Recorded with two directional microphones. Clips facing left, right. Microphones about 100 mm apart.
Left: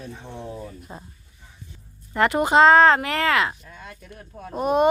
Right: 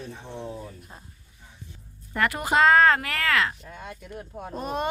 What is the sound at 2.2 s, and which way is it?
A woman's voice, 25° left (ahead or behind).